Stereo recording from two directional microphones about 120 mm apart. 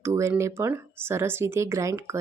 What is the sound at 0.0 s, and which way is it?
Speech, 25° right (ahead or behind).